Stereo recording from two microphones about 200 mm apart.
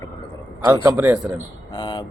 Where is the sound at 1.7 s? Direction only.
25° left (ahead or behind).